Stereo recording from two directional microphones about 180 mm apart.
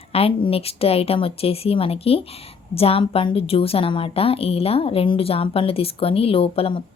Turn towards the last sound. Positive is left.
turn(degrees=30)  # may be behind; listen again after turning